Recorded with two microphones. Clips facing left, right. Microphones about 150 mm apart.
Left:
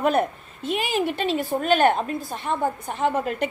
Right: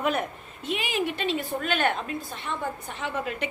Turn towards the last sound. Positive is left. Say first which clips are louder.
# left 7 dB
turn(degrees=45)  # may be behind; listen again after turning